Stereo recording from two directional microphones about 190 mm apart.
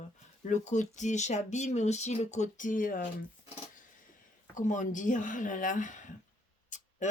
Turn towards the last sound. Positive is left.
turn(degrees=40)  # may be behind; listen again after turning